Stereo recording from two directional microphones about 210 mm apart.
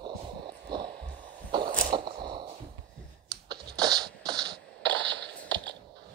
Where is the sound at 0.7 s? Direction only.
20° right (ahead or behind).